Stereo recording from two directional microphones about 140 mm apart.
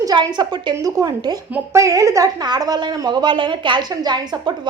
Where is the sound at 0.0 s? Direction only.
30° right (ahead or behind).